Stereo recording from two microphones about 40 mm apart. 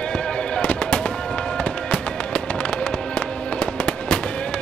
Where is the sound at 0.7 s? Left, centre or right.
Left.